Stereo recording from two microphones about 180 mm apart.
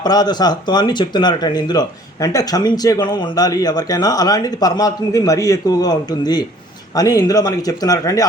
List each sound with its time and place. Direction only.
0.0 s speech: 25° left (ahead or behind)